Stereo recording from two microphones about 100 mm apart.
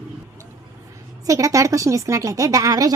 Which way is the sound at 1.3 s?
35° right (ahead or behind).